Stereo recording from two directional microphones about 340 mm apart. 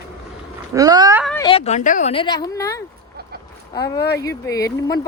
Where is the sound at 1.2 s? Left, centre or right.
Centre.